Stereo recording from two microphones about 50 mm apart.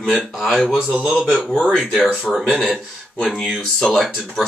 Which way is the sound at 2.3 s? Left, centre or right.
Centre.